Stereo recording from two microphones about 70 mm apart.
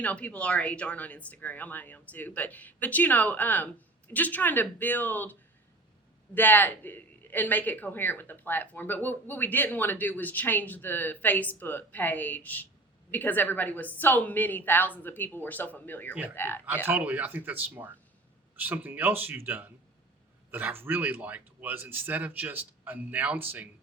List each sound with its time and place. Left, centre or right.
0.0 s speech: centre
16.8 s speech: right